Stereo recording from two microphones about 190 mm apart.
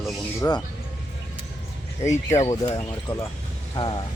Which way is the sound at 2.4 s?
20° left (ahead or behind).